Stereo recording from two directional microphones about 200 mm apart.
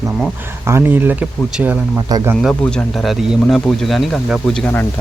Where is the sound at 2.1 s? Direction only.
20° right (ahead or behind).